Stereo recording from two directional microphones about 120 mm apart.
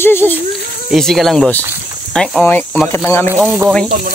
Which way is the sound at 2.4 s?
15° left (ahead or behind).